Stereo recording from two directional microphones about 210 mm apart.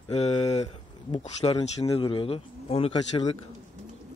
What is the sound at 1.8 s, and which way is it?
Speech, 20° left (ahead or behind).